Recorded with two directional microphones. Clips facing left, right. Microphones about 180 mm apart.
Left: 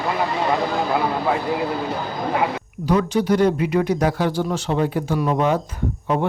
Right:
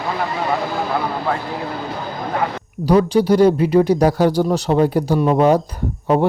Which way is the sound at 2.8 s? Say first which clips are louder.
Right 5 dB; 35° right (ahead or behind).